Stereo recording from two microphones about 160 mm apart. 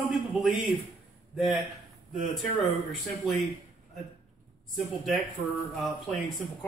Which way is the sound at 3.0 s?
Centre (ahead or behind).